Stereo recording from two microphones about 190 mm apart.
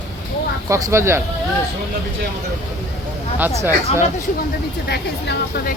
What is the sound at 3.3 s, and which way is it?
Speech, 10° right (ahead or behind).